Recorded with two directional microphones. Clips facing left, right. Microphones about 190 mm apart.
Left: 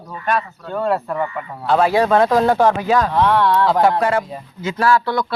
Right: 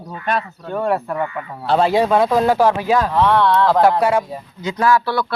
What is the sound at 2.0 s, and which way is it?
Speech, 5° right (ahead or behind).